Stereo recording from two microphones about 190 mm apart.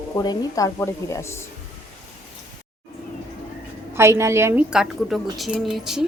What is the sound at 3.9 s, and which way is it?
Speech, 15° right (ahead or behind).